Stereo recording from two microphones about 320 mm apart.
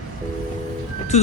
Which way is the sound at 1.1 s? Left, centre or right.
Left.